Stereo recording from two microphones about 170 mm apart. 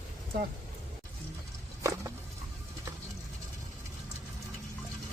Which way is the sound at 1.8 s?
20° right (ahead or behind).